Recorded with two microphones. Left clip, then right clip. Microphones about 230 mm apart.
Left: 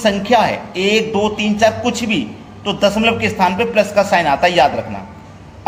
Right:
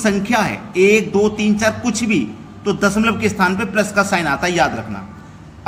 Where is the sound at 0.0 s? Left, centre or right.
Right.